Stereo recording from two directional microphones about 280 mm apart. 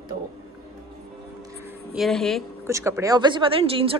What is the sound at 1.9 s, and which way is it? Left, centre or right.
Speech, centre.